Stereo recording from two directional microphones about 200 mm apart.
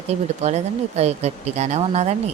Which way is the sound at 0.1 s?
35° right (ahead or behind).